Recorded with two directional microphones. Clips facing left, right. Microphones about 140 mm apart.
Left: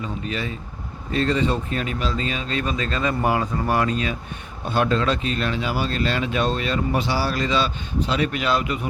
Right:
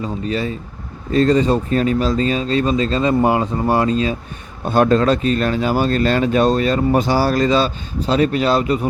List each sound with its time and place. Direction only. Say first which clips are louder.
0.0 s a man's voice: right 6 dB; 35° right (ahead or behind)
4.6 s speech: right 7 dB; 45° right (ahead or behind)